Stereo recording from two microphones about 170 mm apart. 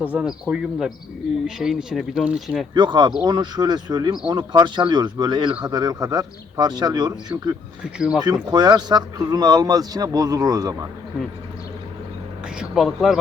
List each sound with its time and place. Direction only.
0.1 s speech: 5° right (ahead or behind)
2.7 s speech: 25° right (ahead or behind)
7.9 s speech: 5° right (ahead or behind)
8.2 s speech: 25° right (ahead or behind)
12.5 s speech: centre (ahead or behind)